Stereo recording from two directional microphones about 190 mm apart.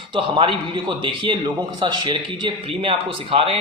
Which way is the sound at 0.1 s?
25° right (ahead or behind).